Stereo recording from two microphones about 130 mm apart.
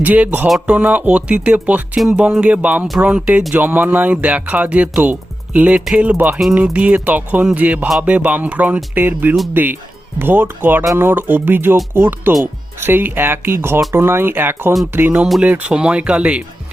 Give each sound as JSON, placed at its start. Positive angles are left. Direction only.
{"t": 0.0, "sound": "speech", "side_deg": -10}